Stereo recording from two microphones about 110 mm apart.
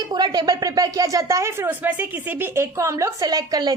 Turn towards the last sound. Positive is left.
turn(degrees=-35)  # may be behind; listen again after turning